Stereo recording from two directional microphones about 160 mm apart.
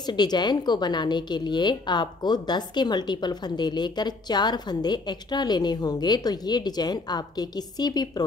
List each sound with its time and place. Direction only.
0.0 s a woman's voice: 25° left (ahead or behind)